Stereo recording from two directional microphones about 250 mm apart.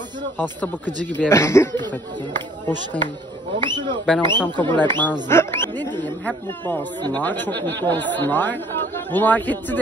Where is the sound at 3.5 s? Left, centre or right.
Centre.